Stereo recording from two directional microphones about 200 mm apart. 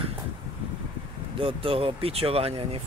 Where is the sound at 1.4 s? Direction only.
25° right (ahead or behind).